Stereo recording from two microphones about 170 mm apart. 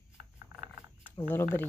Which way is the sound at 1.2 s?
10° left (ahead or behind).